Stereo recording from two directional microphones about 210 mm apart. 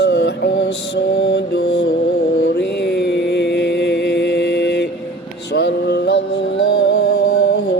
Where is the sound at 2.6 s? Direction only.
55° left (ahead or behind).